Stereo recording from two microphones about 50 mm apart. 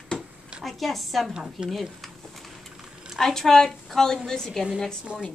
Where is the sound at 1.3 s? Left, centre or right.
Centre.